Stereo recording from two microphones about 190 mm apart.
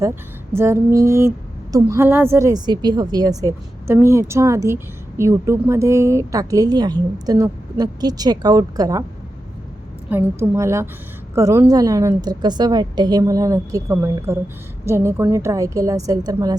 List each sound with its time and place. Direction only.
0.5 s a woman's voice: 15° right (ahead or behind)
10.1 s a woman's voice: 15° right (ahead or behind)